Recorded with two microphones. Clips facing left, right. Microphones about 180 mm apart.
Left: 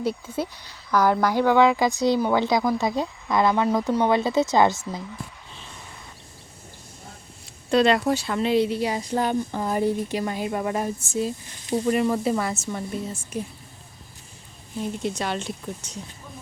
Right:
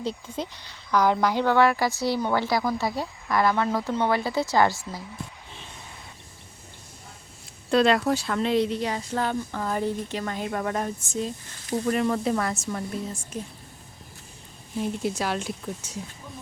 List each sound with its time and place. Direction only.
0.0 s a woman's voice: 10° left (ahead or behind)
7.7 s a woman's voice: centre (ahead or behind); by 11.9 s 20° left (ahead or behind)
11.9 s speech: 5° left (ahead or behind)
14.8 s speech: 5° right (ahead or behind)